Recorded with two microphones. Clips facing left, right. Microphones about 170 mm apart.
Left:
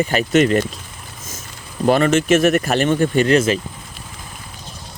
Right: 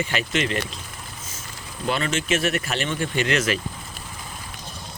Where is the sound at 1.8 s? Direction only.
50° left (ahead or behind); by 3.5 s 30° left (ahead or behind).